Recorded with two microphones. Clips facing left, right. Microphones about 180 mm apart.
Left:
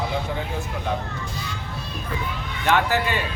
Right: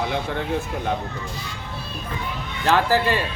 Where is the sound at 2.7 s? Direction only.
35° right (ahead or behind).